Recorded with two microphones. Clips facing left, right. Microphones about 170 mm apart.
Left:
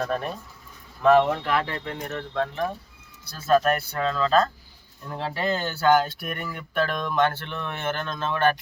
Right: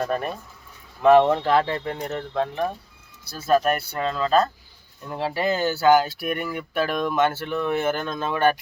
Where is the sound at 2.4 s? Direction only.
15° right (ahead or behind).